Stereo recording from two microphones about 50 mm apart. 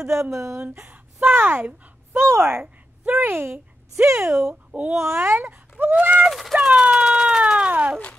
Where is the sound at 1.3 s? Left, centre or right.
Right.